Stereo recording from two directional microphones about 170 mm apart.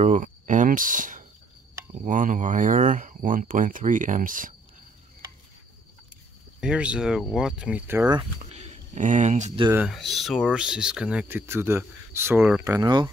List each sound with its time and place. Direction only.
0.0 s speech: 50° right (ahead or behind)
6.6 s speech: 5° right (ahead or behind)
8.4 s a sound: 40° right (ahead or behind)
9.8 s speech: centre (ahead or behind); by 13.1 s 25° right (ahead or behind)